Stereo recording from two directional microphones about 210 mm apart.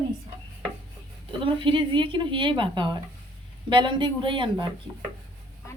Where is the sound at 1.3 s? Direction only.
25° right (ahead or behind).